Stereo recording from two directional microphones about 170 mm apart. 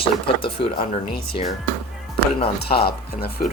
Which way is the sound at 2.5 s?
70° left (ahead or behind).